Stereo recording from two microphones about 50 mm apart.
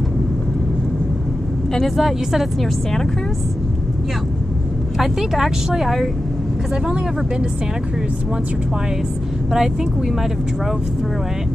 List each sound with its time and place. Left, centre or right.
1.7 s speech: centre
4.9 s speech: centre
9.5 s speech: centre